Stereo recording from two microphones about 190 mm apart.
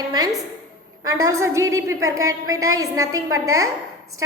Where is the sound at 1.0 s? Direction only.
15° right (ahead or behind).